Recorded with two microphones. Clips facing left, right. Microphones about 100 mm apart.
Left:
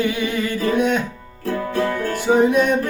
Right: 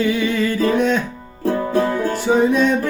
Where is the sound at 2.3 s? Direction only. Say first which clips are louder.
Even; 15° left (ahead or behind).